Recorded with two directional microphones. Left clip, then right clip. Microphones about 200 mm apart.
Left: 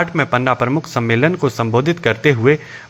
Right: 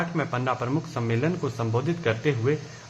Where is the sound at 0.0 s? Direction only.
30° left (ahead or behind).